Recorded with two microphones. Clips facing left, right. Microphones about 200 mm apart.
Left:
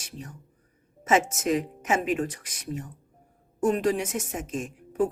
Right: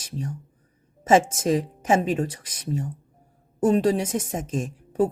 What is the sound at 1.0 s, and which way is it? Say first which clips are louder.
A woman's voice: right 4 dB; 30° right (ahead or behind).